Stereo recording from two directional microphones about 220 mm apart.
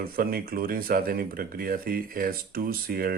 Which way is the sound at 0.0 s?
40° right (ahead or behind).